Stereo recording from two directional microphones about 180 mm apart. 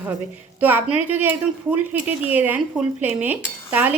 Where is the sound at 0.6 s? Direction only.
10° right (ahead or behind).